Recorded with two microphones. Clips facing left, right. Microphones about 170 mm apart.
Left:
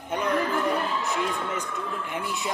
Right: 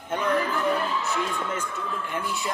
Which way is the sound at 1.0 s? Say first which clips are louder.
Even; 15° left (ahead or behind).